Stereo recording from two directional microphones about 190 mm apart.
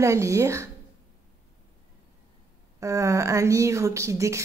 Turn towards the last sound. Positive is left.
turn(degrees=-15)  # may be behind; listen again after turning